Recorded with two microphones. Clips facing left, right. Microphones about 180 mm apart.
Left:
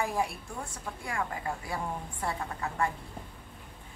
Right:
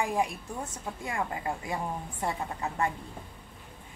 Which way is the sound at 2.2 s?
20° right (ahead or behind).